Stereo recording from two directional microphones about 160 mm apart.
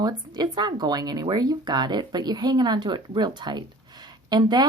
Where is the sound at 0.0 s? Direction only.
25° right (ahead or behind).